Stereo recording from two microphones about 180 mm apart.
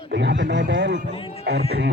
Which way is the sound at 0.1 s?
70° right (ahead or behind).